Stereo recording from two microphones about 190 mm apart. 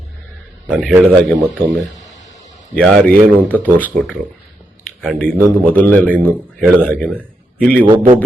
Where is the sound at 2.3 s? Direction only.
40° left (ahead or behind).